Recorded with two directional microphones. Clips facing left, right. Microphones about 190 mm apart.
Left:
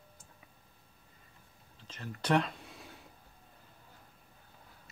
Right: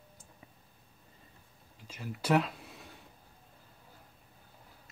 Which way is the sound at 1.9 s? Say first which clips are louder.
Right 1 dB; 10° right (ahead or behind).